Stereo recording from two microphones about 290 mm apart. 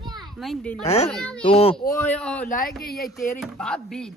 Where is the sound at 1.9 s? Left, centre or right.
Centre.